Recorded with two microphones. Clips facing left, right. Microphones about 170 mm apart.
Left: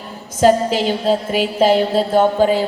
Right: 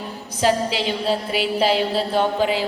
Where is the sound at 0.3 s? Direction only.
45° left (ahead or behind).